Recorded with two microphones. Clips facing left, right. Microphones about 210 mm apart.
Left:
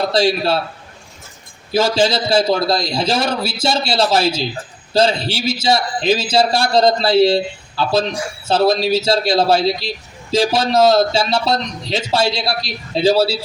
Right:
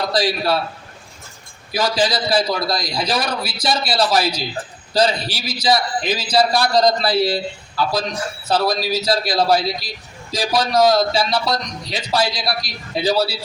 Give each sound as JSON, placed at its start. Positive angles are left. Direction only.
{"t": 0.1, "sound": "a man's voice", "side_deg": 25}
{"t": 1.7, "sound": "a man's voice", "side_deg": 25}